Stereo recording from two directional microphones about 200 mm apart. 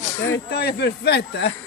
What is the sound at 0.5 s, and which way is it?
Speech, 55° left (ahead or behind).